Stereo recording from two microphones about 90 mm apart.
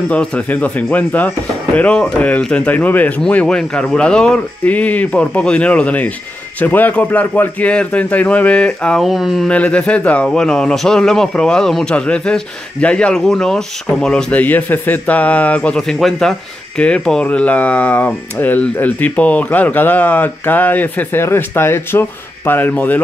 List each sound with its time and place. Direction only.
0.1 s speech: 15° left (ahead or behind)
9.0 s speech: centre (ahead or behind)
9.5 s speech: 15° left (ahead or behind)